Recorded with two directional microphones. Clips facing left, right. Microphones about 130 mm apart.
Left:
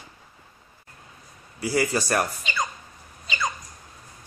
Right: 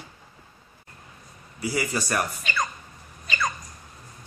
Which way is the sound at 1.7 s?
30° left (ahead or behind).